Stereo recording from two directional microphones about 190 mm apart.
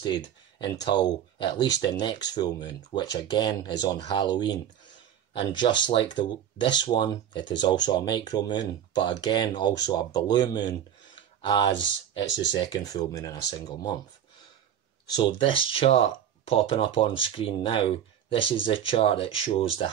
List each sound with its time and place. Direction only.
0.0 s speech: 20° left (ahead or behind)
11.1 s a sound: 25° left (ahead or behind)
11.7 s speech: 75° left (ahead or behind)
12.5 s speech: 20° left (ahead or behind)
15.0 s speech: 25° left (ahead or behind)